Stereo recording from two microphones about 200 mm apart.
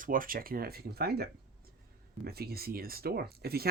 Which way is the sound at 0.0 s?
45° right (ahead or behind).